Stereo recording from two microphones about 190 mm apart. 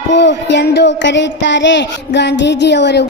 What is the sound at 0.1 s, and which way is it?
Speech, 65° left (ahead or behind).